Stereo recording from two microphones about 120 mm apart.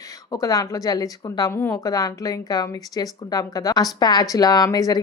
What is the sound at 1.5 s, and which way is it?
A woman's voice, 20° left (ahead or behind).